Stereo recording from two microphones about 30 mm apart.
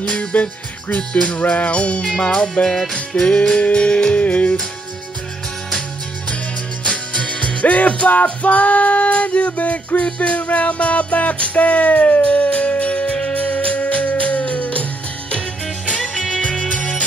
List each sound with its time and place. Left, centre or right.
0.1 s music: left
0.9 s music: left
1.4 s music: left
2.6 s music: left
3.5 s music: left
4.2 s music: left
6.8 s music: left
15.9 s music: left